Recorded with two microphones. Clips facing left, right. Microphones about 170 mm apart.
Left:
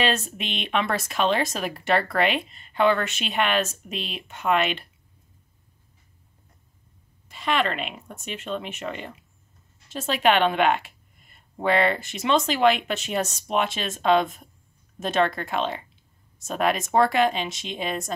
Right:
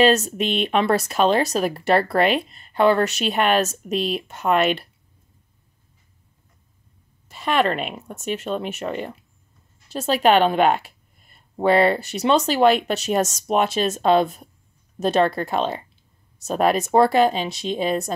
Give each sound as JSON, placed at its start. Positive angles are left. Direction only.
{"t": 0.0, "sound": "speech", "side_deg": -40}
{"t": 7.2, "sound": "speech", "side_deg": -40}